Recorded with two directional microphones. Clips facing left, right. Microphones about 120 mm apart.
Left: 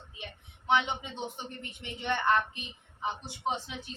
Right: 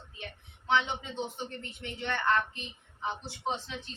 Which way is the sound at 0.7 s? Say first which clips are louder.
Left 1 dB; 15° left (ahead or behind).